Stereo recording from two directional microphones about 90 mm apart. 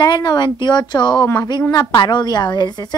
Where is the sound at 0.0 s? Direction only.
55° left (ahead or behind).